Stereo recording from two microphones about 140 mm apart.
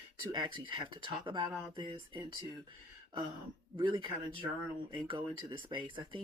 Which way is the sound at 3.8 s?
35° right (ahead or behind).